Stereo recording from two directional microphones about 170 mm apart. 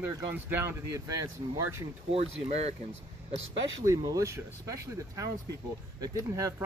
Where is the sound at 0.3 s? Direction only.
15° right (ahead or behind).